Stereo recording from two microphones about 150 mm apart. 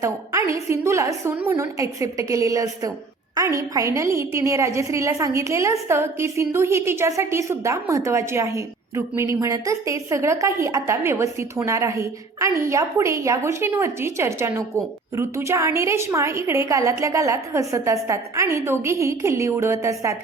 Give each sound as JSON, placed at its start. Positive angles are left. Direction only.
{"t": 0.0, "sound": "a woman's voice", "side_deg": -20}